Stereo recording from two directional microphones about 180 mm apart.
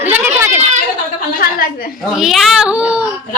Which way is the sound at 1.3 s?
50° left (ahead or behind).